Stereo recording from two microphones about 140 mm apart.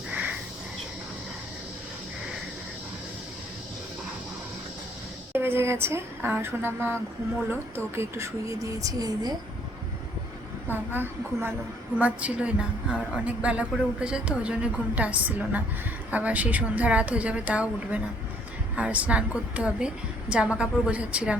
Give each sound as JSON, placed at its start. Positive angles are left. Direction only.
{"t": 0.1, "sound": "a sound", "side_deg": -10}
{"t": 5.3, "sound": "a woman's voice", "side_deg": -15}
{"t": 10.7, "sound": "a woman's voice", "side_deg": -15}